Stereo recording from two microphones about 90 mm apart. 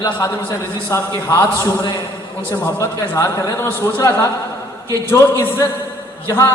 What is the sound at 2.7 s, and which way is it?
A man's voice, 30° left (ahead or behind).